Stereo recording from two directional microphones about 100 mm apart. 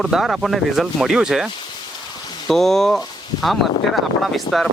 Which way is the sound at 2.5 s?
5° left (ahead or behind).